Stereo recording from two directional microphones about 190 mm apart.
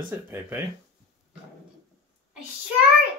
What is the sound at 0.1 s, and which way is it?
Speech, 15° right (ahead or behind).